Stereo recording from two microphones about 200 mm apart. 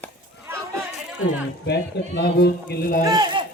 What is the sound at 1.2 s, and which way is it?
Speech, 60° left (ahead or behind).